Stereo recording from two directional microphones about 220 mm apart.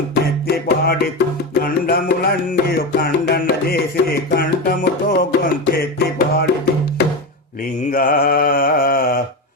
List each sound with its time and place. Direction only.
0.1 s music: 45° left (ahead or behind)
7.8 s mantra: 40° left (ahead or behind)